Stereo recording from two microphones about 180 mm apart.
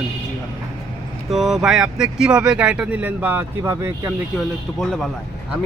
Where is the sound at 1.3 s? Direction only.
Centre (ahead or behind).